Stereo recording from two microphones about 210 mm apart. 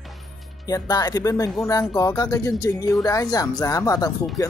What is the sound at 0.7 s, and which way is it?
Speech, 15° left (ahead or behind).